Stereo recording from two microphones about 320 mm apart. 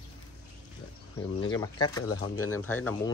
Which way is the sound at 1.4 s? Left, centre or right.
Centre.